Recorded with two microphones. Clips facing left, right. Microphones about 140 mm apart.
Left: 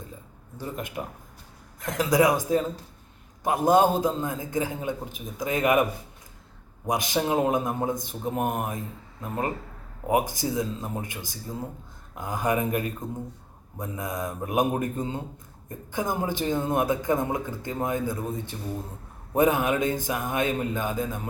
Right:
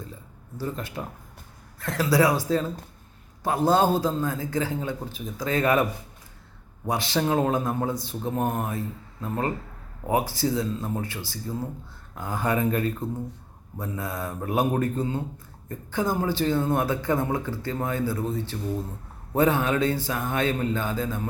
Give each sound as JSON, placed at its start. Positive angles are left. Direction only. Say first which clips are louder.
{"t": 0.5, "sound": "speech", "louder": "right 1 dB", "side_deg": 15}
{"t": 6.8, "sound": "speech", "louder": "even", "side_deg": 15}